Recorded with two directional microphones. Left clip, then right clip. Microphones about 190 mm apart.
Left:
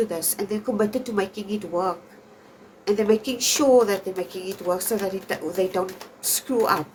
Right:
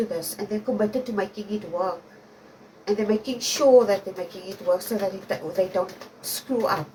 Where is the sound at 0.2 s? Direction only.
50° left (ahead or behind).